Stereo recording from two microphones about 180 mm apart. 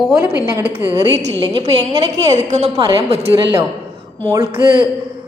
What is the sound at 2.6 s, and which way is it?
Speech, 20° right (ahead or behind).